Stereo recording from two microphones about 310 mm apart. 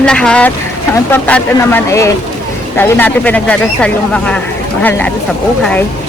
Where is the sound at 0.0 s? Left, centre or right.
Centre.